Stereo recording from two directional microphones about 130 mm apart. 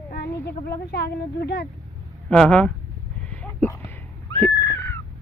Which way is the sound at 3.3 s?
10° left (ahead or behind).